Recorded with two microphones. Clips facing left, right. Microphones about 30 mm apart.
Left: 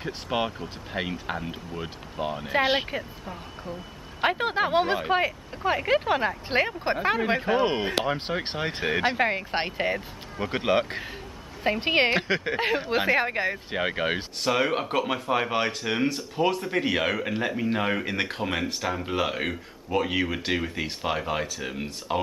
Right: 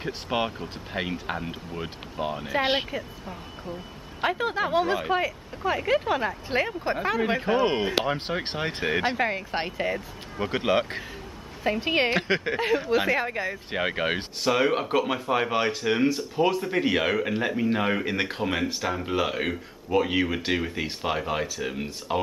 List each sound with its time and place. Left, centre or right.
0.0 s speech: centre
2.9 s speech: centre
6.5 s speech: left
7.2 s speech: centre
9.5 s speech: left
10.3 s speech: centre
11.8 s speech: left
13.7 s speech: centre